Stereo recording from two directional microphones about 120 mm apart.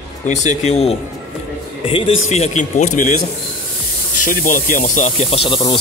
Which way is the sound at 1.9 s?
50° left (ahead or behind).